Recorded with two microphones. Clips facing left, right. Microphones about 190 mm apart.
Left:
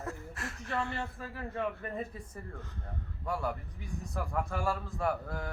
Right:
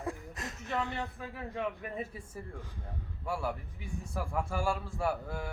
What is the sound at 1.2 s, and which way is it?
A man's voice, centre (ahead or behind).